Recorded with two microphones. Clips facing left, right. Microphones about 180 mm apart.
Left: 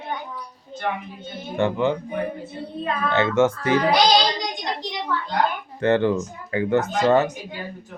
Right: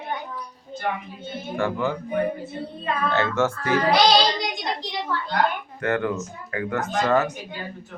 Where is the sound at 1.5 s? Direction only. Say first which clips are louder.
Left 4 dB; 20° left (ahead or behind).